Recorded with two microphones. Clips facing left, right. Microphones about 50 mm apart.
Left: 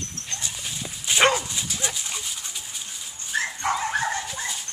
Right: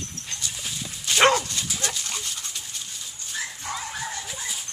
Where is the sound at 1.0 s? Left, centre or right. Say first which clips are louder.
Right 1 dB; centre.